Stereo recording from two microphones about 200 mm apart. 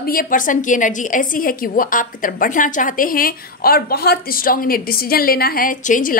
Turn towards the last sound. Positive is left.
turn(degrees=40)  # may be behind; listen again after turning